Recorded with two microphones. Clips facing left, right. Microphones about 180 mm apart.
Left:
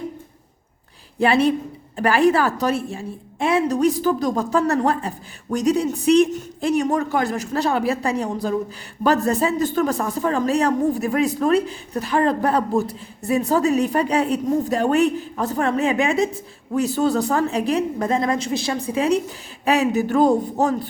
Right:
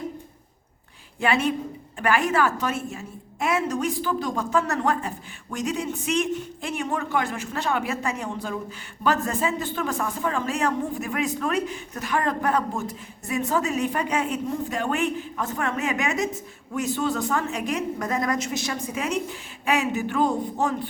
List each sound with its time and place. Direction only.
1.2 s speech: 35° left (ahead or behind)